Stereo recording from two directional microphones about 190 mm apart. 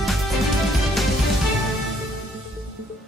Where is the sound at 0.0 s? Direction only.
Centre (ahead or behind).